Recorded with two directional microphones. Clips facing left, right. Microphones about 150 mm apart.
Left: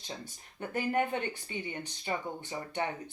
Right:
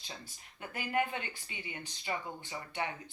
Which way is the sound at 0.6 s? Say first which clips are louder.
Left 4 dB; 35° left (ahead or behind).